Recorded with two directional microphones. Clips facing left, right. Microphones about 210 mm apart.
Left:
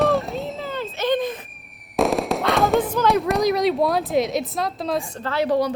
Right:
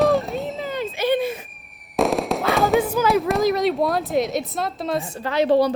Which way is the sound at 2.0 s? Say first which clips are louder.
Even; centre (ahead or behind).